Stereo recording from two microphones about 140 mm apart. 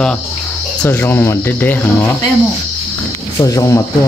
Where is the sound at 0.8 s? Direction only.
15° left (ahead or behind).